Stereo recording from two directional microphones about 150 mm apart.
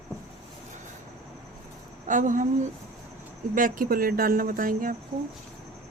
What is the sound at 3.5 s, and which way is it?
Speech, 65° right (ahead or behind).